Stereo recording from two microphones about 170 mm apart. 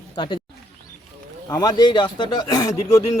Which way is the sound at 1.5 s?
20° left (ahead or behind).